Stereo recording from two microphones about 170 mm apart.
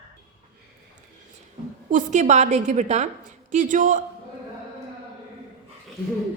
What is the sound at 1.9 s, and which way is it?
A woman's voice, 45° right (ahead or behind).